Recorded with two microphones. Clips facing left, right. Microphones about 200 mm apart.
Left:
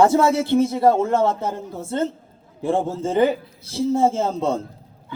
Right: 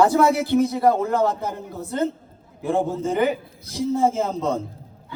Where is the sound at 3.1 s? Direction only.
30° left (ahead or behind).